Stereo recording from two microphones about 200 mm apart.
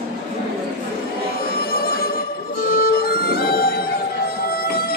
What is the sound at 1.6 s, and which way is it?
Music, 50° left (ahead or behind).